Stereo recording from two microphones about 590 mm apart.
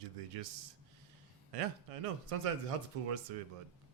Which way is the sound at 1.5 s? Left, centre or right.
Right.